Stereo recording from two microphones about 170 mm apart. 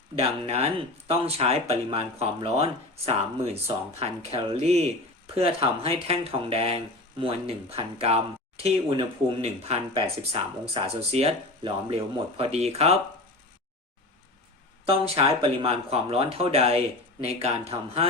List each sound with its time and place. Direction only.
0.2 s speech: 35° right (ahead or behind)
14.8 s speech: 35° right (ahead or behind)